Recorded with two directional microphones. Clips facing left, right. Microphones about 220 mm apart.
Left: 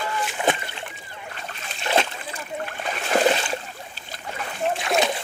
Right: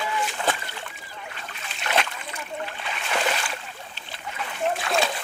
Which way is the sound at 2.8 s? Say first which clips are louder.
Left 8 dB; 40° left (ahead or behind).